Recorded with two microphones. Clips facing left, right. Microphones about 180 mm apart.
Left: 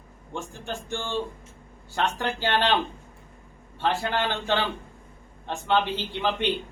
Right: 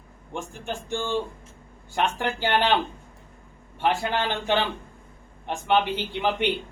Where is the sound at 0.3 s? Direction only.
15° right (ahead or behind).